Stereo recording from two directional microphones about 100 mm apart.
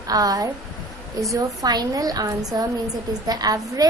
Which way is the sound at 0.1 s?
40° right (ahead or behind).